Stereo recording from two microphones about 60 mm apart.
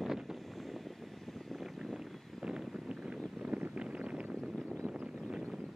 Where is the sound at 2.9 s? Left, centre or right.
Centre.